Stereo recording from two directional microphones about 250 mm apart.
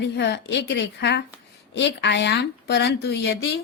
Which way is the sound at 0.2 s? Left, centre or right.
Left.